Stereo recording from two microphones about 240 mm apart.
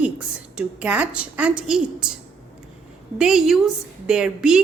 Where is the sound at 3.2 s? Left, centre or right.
Centre.